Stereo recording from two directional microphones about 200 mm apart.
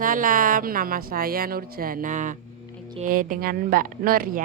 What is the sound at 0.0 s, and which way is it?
A woman's voice, 45° right (ahead or behind).